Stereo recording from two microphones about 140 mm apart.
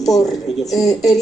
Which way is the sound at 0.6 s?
25° left (ahead or behind).